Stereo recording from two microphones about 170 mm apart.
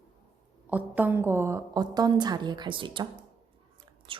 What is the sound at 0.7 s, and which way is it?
A woman's voice, 10° right (ahead or behind).